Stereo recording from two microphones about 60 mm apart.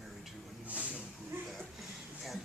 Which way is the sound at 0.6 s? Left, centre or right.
Right.